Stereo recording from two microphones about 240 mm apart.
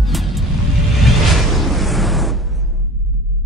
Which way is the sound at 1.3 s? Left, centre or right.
Centre.